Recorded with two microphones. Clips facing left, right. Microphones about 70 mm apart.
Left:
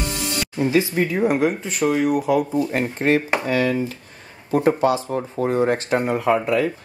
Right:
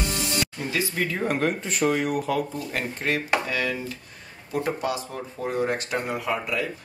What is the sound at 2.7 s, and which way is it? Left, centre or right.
Speech, left.